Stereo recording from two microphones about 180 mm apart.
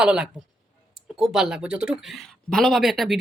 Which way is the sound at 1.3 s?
5° right (ahead or behind).